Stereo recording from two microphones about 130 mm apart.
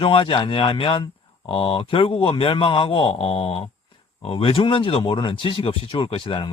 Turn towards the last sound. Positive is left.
turn(degrees=45)  # may be behind; listen again after turning